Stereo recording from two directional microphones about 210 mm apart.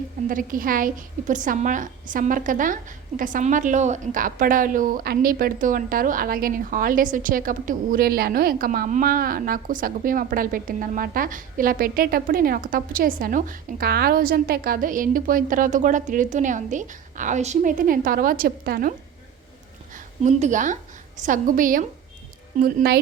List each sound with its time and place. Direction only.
0.3 s a woman's voice: 40° right (ahead or behind)